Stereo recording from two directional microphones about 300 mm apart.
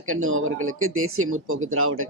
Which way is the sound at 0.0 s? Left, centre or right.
Right.